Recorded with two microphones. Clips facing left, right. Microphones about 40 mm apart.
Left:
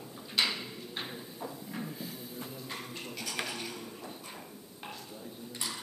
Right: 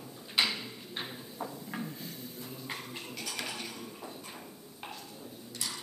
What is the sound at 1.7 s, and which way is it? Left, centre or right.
Music, centre.